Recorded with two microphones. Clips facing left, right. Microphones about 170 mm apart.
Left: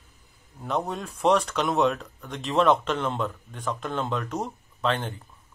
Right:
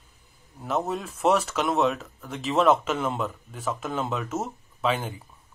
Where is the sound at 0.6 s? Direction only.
5° right (ahead or behind).